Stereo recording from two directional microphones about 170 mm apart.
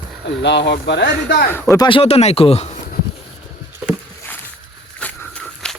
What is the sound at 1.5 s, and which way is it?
Speech, 15° left (ahead or behind).